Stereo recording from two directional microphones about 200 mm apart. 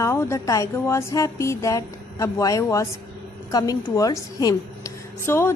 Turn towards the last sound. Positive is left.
turn(degrees=10)  # may be behind; listen again after turning